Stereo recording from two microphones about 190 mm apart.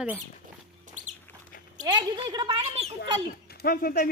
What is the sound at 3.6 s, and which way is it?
Speech, 50° left (ahead or behind).